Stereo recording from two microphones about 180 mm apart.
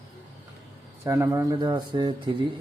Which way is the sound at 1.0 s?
15° right (ahead or behind).